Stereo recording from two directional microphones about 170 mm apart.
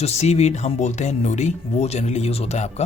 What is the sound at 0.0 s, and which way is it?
Speech, 40° left (ahead or behind).